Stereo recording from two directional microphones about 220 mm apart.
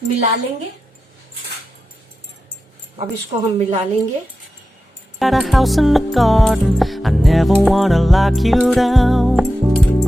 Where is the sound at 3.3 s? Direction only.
30° right (ahead or behind).